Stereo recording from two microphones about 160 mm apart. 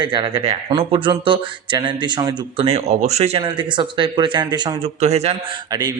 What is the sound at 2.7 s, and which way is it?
Speech, 40° right (ahead or behind).